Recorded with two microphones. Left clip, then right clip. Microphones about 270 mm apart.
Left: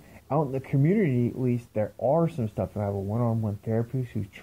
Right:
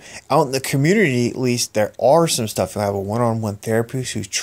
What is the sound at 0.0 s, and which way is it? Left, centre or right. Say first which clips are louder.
Speech: right 11 dB; right.